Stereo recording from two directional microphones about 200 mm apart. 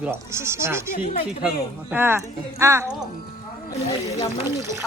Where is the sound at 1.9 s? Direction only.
10° right (ahead or behind).